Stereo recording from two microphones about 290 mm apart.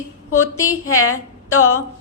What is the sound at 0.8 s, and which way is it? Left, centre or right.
Speech, left.